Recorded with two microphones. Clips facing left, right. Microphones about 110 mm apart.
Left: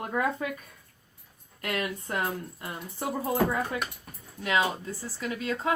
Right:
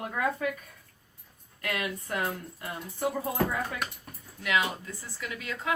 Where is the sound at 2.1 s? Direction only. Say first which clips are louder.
Even; 25° left (ahead or behind).